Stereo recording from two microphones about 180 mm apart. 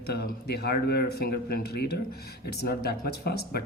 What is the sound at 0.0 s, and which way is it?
Speech, 65° left (ahead or behind).